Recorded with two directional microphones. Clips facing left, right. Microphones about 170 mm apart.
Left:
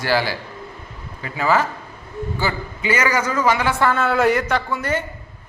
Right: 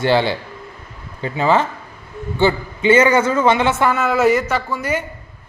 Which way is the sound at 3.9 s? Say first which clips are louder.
Right 2 dB; 5° right (ahead or behind).